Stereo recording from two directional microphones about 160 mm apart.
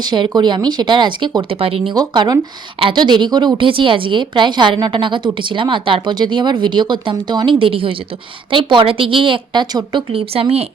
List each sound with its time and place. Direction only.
0.0 s a woman's voice: 25° right (ahead or behind)